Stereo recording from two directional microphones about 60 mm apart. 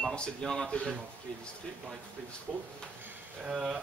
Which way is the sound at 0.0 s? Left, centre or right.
Centre.